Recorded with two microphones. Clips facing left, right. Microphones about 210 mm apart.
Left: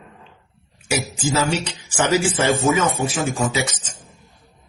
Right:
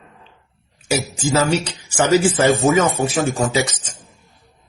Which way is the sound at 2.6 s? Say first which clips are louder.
Right 3 dB; 40° right (ahead or behind).